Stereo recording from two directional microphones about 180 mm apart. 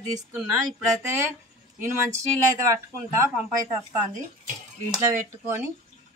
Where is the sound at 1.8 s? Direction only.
15° right (ahead or behind).